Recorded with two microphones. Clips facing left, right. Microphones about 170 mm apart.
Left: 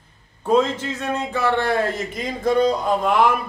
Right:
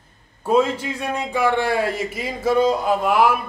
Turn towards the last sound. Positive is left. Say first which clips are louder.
# right 1 dB
turn(degrees=-5)  # may be behind; listen again after turning